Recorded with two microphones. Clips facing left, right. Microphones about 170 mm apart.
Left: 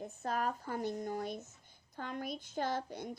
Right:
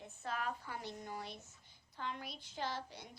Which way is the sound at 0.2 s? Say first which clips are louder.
Left 5 dB; 40° left (ahead or behind).